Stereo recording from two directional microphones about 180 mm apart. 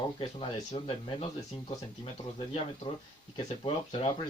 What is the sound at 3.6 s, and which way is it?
Speech, 30° left (ahead or behind).